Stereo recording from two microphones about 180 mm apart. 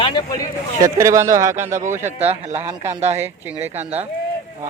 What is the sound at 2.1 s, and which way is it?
Speech, 35° right (ahead or behind).